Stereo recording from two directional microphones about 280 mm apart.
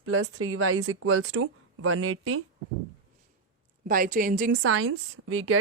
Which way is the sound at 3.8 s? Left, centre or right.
Right.